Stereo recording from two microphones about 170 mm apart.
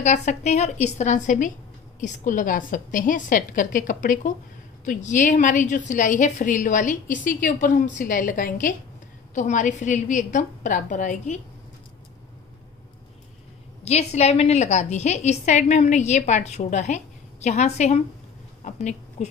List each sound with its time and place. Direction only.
0.0 s a woman's voice: 45° left (ahead or behind)
13.8 s a woman's voice: 40° left (ahead or behind)